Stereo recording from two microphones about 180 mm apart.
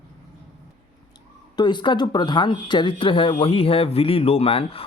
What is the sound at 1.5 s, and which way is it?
Speech, 25° left (ahead or behind).